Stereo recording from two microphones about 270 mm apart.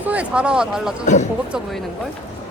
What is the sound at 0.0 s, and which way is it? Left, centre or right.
Speech, centre.